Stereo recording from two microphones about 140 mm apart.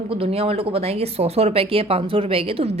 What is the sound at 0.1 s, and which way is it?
A woman's voice, 45° right (ahead or behind).